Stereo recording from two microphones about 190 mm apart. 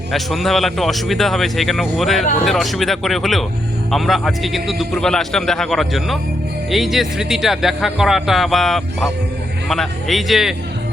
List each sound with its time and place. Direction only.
0.1 s speech: centre (ahead or behind)